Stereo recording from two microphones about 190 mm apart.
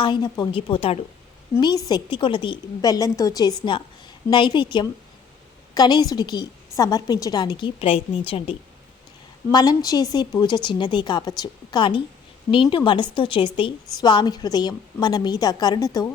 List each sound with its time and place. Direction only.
0.0 s a woman's voice: 25° left (ahead or behind)